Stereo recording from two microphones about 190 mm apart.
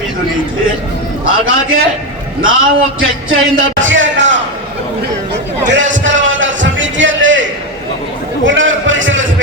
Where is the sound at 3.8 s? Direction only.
80° right.